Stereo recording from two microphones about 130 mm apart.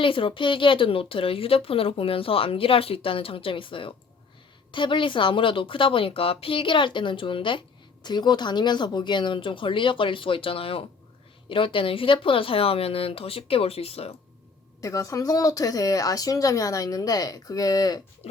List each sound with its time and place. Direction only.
0.0 s a woman's voice: 40° left (ahead or behind)
14.8 s speech: 25° left (ahead or behind)